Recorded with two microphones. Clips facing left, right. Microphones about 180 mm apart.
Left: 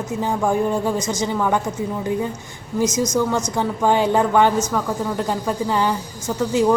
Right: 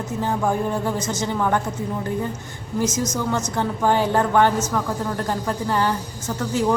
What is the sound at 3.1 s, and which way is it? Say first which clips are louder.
Speech: left 4 dB; 10° left (ahead or behind).